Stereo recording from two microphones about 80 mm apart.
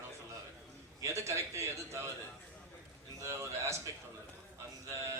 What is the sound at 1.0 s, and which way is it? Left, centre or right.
Speech, right.